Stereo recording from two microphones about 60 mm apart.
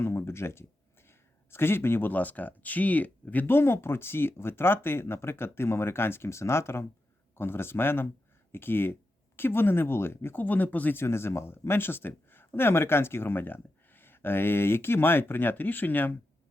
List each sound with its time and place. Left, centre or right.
0.0 s speech: left
3.4 s speech: left
10.4 s speech: left
11.0 s speech: left